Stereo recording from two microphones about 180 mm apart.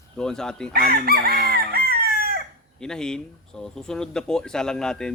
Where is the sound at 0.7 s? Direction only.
55° right (ahead or behind).